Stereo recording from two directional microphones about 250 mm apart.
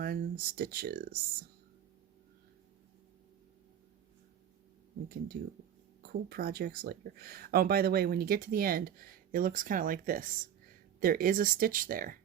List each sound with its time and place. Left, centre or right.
0.0 s speech: right
5.3 s speech: right